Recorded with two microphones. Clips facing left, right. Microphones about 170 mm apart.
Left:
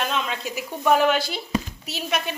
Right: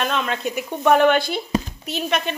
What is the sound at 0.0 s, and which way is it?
Speech, 55° right (ahead or behind).